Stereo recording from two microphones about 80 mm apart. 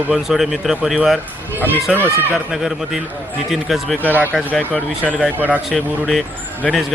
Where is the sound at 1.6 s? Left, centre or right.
Right.